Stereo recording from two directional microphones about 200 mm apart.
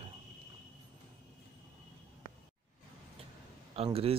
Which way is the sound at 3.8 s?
30° right (ahead or behind).